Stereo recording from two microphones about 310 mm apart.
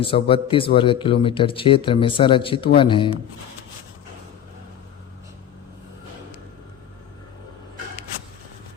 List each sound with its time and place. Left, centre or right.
0.0 s speech: centre